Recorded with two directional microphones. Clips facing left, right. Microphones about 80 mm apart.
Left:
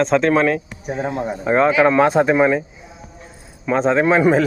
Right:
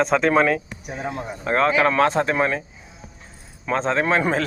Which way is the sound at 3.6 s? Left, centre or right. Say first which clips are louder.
Left 5 dB; centre.